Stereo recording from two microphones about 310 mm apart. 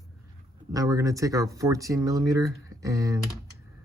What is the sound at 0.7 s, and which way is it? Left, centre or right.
Speech, centre.